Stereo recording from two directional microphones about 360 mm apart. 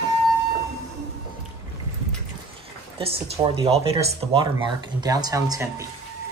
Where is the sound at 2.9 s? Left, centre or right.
Centre.